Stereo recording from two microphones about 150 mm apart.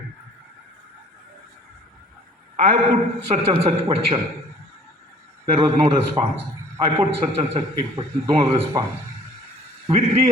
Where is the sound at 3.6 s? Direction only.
45° right (ahead or behind).